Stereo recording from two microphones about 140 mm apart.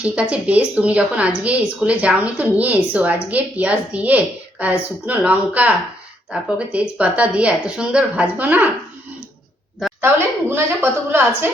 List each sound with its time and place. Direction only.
0.0 s a woman's voice: 10° right (ahead or behind)
10.5 s a woman's voice: 15° right (ahead or behind)